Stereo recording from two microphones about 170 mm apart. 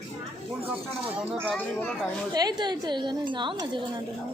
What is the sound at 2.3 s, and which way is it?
Speech, 25° right (ahead or behind).